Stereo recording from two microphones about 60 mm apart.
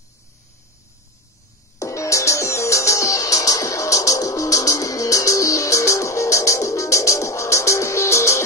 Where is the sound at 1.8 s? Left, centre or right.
Left.